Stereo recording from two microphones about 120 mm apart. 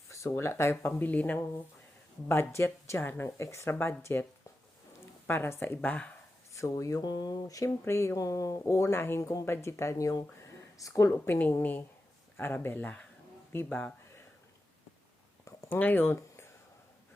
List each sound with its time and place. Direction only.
0.1 s speech: 25° left (ahead or behind)
5.3 s speech: 20° left (ahead or behind)
6.5 s speech: 25° left (ahead or behind)
15.4 s a sound: 25° left (ahead or behind)
15.8 s speech: 15° left (ahead or behind)